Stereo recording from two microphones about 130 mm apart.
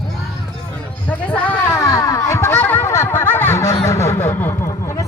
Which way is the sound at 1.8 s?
25° left (ahead or behind).